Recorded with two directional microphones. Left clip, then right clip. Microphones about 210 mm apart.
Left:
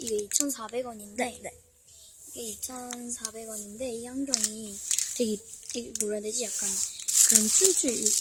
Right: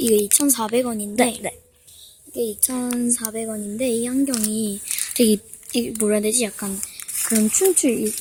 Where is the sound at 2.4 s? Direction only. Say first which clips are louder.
Right 14 dB; 60° right (ahead or behind).